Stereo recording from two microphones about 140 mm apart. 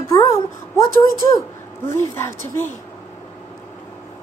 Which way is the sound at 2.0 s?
20° left (ahead or behind).